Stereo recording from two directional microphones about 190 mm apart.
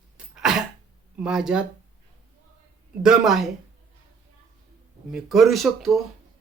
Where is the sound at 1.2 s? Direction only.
5° right (ahead or behind).